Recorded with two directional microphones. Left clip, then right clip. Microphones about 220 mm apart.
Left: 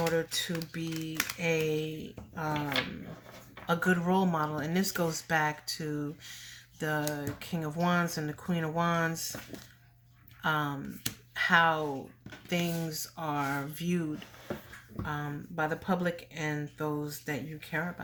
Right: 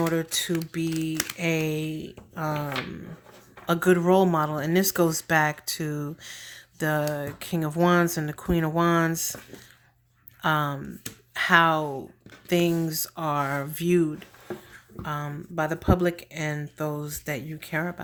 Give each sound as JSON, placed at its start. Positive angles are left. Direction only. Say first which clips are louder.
{"t": 0.1, "sound": "speech", "louder": "right 4 dB", "side_deg": -45}
{"t": 1.1, "sound": "speech", "louder": "right 4 dB", "side_deg": -15}
{"t": 1.4, "sound": "speech", "louder": "right 2 dB", "side_deg": -45}
{"t": 3.7, "sound": "speech", "louder": "right 8 dB", "side_deg": -40}
{"t": 10.4, "sound": "speech", "louder": "right 6 dB", "side_deg": -45}